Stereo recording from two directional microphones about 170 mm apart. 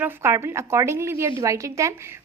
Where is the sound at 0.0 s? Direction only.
15° right (ahead or behind).